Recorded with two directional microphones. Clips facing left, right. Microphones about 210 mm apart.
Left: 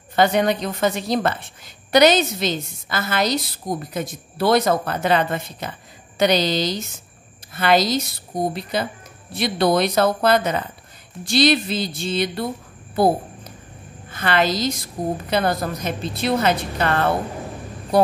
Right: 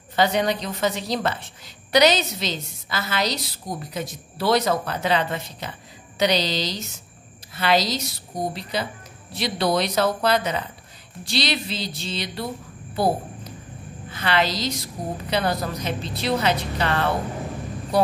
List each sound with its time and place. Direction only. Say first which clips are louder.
0.1 s a woman's voice: left 3 dB; 55° left (ahead or behind)